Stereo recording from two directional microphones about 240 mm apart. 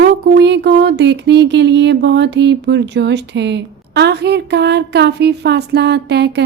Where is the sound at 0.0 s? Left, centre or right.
Right.